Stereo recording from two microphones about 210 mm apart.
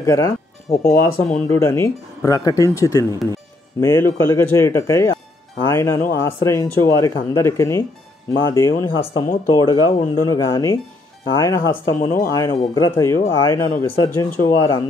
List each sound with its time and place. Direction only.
0.0 s speech: 15° left (ahead or behind)